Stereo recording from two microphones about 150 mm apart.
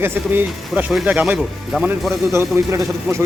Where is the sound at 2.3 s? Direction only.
20° right (ahead or behind).